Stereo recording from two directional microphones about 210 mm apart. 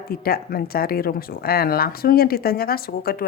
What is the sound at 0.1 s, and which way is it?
Speech, 45° left (ahead or behind).